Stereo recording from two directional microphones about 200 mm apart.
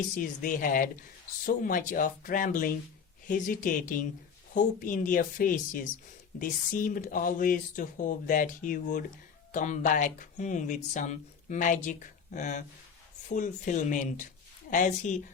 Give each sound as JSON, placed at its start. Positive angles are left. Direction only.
{"t": 0.1, "sound": "speech", "side_deg": 40}